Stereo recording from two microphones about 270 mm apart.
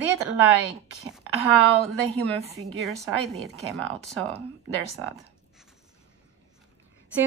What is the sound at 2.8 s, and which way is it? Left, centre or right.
Speech, centre.